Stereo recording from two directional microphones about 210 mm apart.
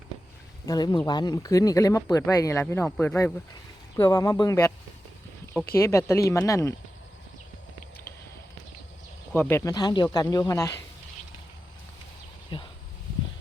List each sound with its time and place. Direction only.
0.6 s speech: 15° left (ahead or behind)
5.7 s speech: 15° left (ahead or behind)
9.3 s speech: 10° left (ahead or behind)
12.5 s speech: 25° left (ahead or behind)